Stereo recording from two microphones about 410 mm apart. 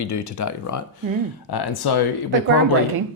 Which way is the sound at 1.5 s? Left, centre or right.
Left.